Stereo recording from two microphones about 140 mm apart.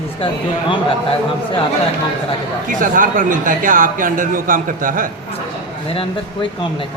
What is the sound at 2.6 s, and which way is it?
Speech, 75° right (ahead or behind).